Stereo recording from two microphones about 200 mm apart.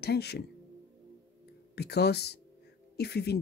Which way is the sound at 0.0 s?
55° left (ahead or behind).